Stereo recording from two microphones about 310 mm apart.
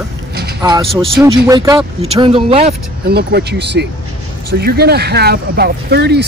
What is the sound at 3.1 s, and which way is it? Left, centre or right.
Speech, right.